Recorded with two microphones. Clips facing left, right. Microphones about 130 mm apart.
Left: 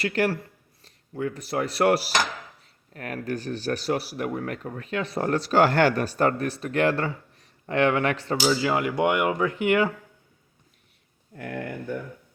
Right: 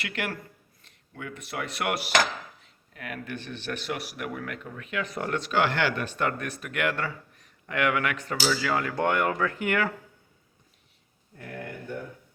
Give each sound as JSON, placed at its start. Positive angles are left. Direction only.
{"t": 0.0, "sound": "speech", "side_deg": 35}
{"t": 11.3, "sound": "speech", "side_deg": 90}